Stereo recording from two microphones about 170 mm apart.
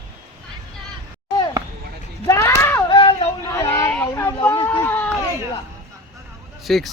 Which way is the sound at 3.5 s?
15° left (ahead or behind).